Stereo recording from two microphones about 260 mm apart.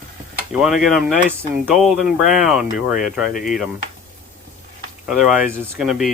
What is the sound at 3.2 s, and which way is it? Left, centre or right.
Speech, left.